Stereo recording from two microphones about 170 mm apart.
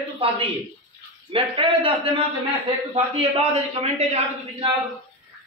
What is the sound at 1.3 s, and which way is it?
Speech, 30° right (ahead or behind).